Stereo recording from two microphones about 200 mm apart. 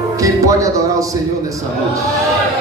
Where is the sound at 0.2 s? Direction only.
15° right (ahead or behind).